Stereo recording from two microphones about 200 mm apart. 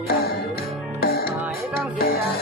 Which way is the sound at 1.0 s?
50° left (ahead or behind).